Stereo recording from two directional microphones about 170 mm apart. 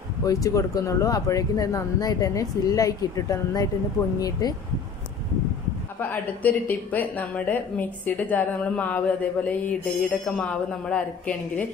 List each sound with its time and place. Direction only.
0.2 s speech: 20° left (ahead or behind)
5.9 s speech: 10° left (ahead or behind)